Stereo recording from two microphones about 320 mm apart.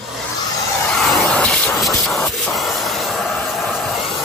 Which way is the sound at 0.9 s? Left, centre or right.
Centre.